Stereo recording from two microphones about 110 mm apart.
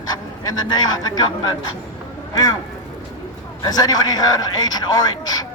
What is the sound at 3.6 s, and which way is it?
Speech, 35° left (ahead or behind).